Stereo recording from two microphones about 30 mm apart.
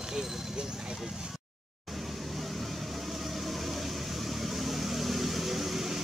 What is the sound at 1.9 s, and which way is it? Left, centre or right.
Vehicle, centre.